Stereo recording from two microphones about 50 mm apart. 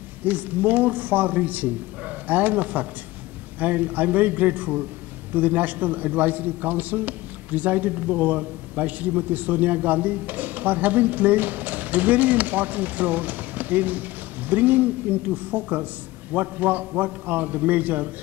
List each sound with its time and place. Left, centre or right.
0.2 s a man's voice: right